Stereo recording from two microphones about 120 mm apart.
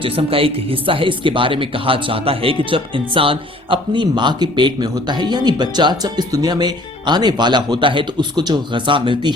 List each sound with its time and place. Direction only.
0.0 s speech: 50° right (ahead or behind)